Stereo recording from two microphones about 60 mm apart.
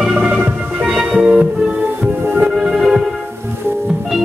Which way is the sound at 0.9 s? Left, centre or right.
Centre.